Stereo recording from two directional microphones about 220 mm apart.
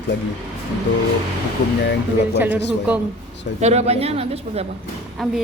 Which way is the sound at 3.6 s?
30° right (ahead or behind).